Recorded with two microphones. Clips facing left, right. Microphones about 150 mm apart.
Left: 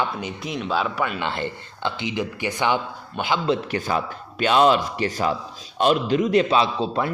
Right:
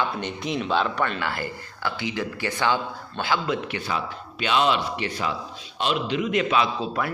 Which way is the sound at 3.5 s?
40° left (ahead or behind).